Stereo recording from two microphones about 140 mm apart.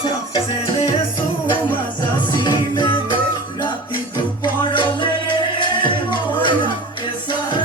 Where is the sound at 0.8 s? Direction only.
35° left (ahead or behind).